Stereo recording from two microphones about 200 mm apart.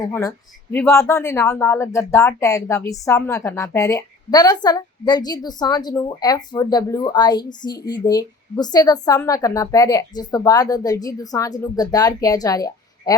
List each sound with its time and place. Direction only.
0.0 s a woman's voice: 15° left (ahead or behind)